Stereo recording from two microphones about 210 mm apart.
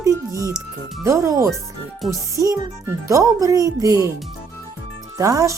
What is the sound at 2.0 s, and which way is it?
Speech, centre (ahead or behind).